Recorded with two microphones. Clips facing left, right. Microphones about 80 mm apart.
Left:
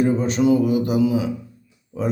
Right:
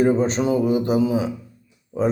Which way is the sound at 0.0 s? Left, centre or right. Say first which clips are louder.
Even; right.